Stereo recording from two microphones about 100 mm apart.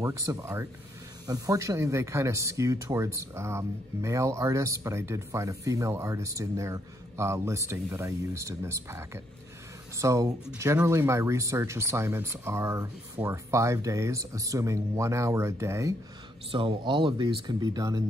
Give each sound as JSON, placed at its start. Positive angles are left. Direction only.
{"t": 0.0, "sound": "speech", "side_deg": -30}
{"t": 16.5, "sound": "speech", "side_deg": -60}